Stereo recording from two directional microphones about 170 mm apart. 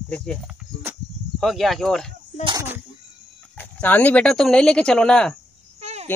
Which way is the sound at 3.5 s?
10° left (ahead or behind).